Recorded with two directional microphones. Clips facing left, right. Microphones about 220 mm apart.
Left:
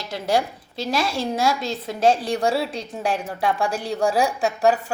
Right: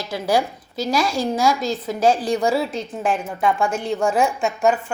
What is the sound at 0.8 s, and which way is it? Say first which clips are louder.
A woman's voice: right 3 dB; 25° left (ahead or behind).